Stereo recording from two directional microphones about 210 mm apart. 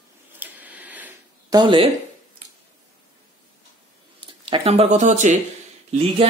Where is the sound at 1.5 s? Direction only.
25° right (ahead or behind).